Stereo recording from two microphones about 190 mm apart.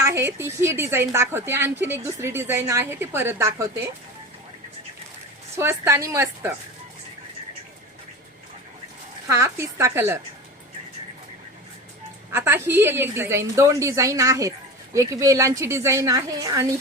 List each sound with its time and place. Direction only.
0.0 s a woman's voice: 15° right (ahead or behind)
5.5 s a woman's voice: 15° right (ahead or behind)
9.2 s a woman's voice: 15° right (ahead or behind)
12.3 s a woman's voice: 10° right (ahead or behind)